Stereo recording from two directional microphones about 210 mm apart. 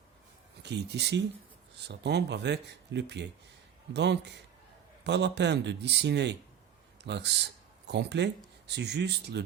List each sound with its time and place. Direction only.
0.6 s speech: 55° right (ahead or behind)